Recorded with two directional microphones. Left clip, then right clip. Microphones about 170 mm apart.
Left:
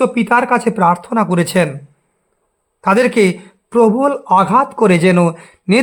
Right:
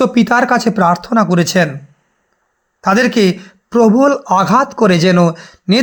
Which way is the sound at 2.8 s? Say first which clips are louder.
Even; centre (ahead or behind).